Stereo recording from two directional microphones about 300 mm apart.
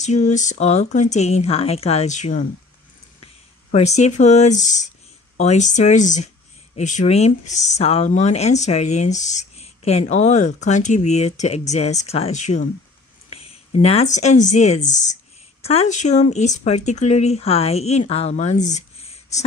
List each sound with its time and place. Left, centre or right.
0.0 s speech: left
3.7 s speech: left